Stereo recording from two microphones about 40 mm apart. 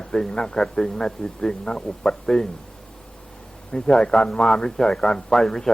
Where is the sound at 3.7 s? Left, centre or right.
Left.